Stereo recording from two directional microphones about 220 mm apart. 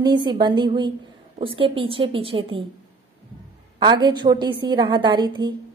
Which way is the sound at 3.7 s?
20° right (ahead or behind).